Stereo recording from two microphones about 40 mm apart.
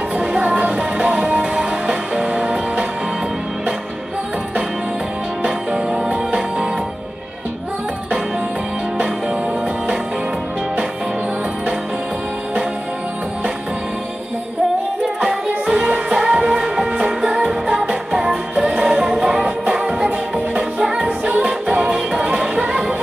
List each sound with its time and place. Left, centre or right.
0.2 s music: right
5.4 s music: right
15.1 s music: right
17.7 s music: right
19.4 s music: right